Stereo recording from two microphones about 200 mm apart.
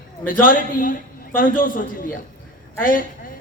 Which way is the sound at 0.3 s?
45° left (ahead or behind).